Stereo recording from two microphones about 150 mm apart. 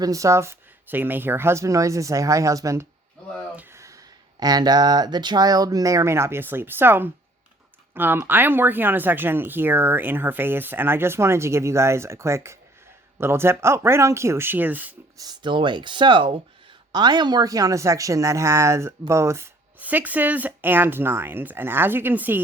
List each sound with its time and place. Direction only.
0.0 s speech: 20° right (ahead or behind)
3.5 s a sound: 15° right (ahead or behind)
4.4 s speech: 25° right (ahead or behind)
15.2 s speech: 30° right (ahead or behind); by 22.4 s 10° right (ahead or behind)